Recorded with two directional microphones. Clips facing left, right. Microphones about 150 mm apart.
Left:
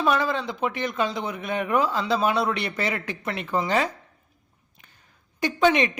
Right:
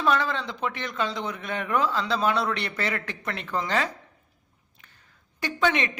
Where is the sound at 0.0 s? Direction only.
15° left (ahead or behind).